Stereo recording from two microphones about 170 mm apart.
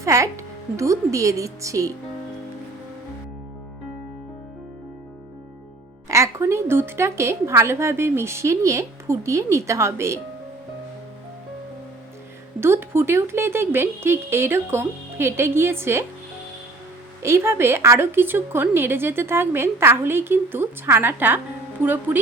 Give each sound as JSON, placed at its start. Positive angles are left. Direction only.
{"t": 0.0, "sound": "speech", "side_deg": -15}
{"t": 6.1, "sound": "a woman's voice", "side_deg": -15}
{"t": 12.5, "sound": "a woman's voice", "side_deg": -15}
{"t": 17.2, "sound": "a woman's voice", "side_deg": -15}